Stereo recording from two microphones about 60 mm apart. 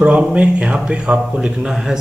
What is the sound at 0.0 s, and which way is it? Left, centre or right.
A man's voice, centre.